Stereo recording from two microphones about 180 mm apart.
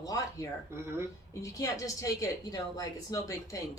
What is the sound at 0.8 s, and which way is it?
Speech, 15° right (ahead or behind).